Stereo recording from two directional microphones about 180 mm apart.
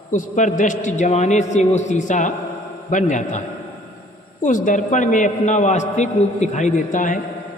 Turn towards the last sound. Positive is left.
turn(degrees=45)  # may be behind; listen again after turning